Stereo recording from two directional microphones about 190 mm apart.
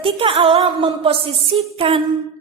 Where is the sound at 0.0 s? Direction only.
30° right (ahead or behind).